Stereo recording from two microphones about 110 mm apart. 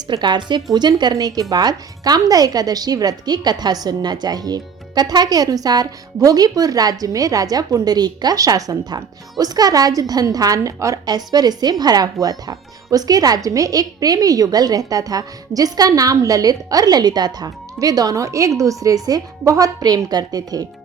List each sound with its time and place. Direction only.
0.1 s a woman's voice: 45° right (ahead or behind)